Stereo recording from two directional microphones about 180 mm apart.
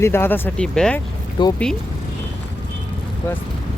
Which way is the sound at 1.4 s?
25° left (ahead or behind).